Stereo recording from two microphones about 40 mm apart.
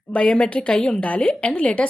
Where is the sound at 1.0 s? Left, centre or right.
Left.